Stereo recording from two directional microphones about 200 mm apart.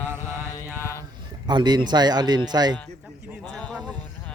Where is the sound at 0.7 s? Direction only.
15° left (ahead or behind).